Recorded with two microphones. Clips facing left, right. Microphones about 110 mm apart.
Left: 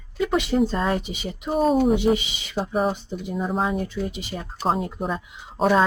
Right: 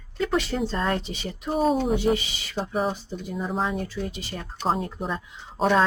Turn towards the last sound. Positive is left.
turn(degrees=5)  # may be behind; listen again after turning